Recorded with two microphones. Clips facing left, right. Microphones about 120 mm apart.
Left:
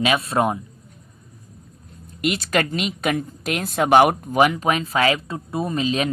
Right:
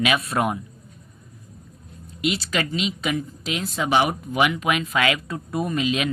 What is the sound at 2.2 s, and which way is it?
A woman's voice, 50° left (ahead or behind).